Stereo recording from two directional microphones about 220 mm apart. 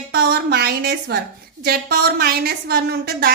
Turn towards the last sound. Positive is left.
turn(degrees=-45)  # may be behind; listen again after turning